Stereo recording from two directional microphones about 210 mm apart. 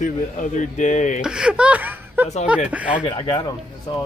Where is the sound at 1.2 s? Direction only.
5° right (ahead or behind).